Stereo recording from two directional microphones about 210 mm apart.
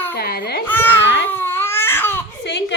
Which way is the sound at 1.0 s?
60° left (ahead or behind).